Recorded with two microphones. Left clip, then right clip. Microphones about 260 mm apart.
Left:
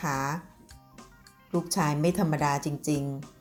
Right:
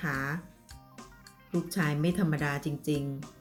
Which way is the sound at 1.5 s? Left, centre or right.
Centre.